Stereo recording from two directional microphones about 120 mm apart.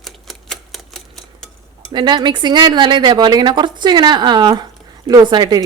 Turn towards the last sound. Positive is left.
turn(degrees=-35)  # may be behind; listen again after turning